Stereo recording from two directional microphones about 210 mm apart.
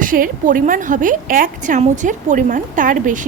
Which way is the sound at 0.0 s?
40° right (ahead or behind).